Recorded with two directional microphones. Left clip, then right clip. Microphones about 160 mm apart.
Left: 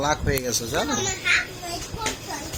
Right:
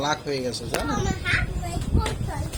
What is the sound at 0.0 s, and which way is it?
Speech, 5° left (ahead or behind).